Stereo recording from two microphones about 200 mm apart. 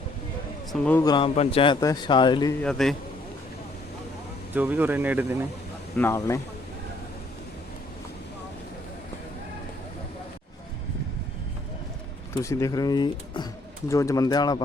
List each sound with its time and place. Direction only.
0.7 s speech: 10° left (ahead or behind)
1.0 s a man's voice: 25° left (ahead or behind)
2.6 s a man's voice: 5° left (ahead or behind)
4.5 s speech: 10° right (ahead or behind)
6.0 s speech: 15° left (ahead or behind)
12.4 s speech: 15° left (ahead or behind)